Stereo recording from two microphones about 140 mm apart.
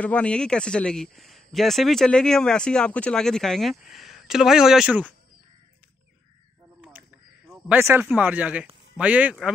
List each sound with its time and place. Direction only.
0.0 s speech: 10° left (ahead or behind)
6.9 s a sound: 5° right (ahead or behind)
7.8 s speech: 15° right (ahead or behind)